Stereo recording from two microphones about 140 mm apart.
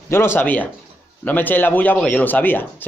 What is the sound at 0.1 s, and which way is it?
Speech, 15° left (ahead or behind).